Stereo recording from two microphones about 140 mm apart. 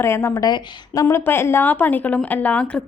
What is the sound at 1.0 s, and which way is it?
A woman's voice, 15° left (ahead or behind).